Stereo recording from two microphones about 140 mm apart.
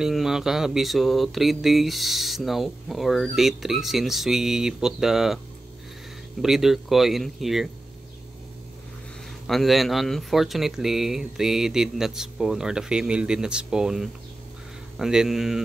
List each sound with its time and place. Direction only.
0.0 s speech: 5° right (ahead or behind)
6.4 s speech: centre (ahead or behind)
9.5 s speech: centre (ahead or behind)